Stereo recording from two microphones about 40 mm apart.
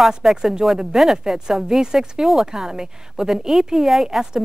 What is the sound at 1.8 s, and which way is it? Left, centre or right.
Speech, centre.